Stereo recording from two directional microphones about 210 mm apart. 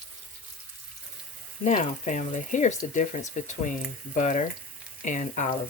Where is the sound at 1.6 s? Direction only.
35° left (ahead or behind).